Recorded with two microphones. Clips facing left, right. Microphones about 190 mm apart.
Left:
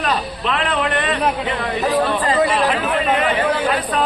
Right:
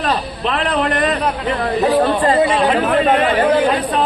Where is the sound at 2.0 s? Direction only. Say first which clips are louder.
Right 3 dB; 45° right (ahead or behind).